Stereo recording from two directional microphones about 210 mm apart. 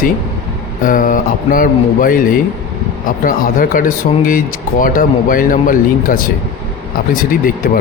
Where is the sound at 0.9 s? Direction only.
40° left (ahead or behind).